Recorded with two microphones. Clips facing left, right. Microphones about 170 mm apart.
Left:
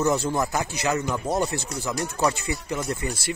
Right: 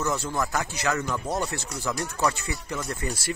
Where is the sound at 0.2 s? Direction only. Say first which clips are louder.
Left 3 dB; 20° left (ahead or behind).